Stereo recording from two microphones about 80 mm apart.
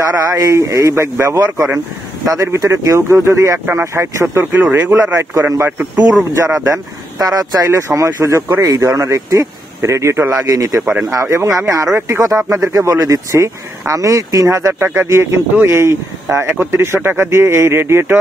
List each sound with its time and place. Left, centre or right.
0.3 s speech: right
4.5 s speech: right
4.9 s speech: right
5.7 s speech: centre
6.3 s speech: right